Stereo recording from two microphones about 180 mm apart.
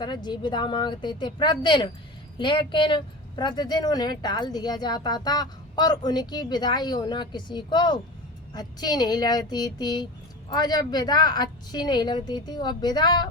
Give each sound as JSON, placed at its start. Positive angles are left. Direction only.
{"t": 0.0, "sound": "speech", "side_deg": 25}